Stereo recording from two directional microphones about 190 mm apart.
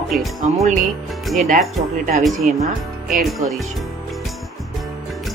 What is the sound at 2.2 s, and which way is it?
Speech, centre (ahead or behind).